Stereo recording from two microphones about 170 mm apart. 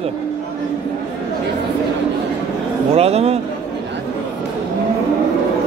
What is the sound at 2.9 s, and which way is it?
Speech, 35° right (ahead or behind).